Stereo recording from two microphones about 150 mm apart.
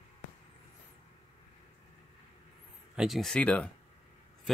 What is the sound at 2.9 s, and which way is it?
Speech, centre (ahead or behind).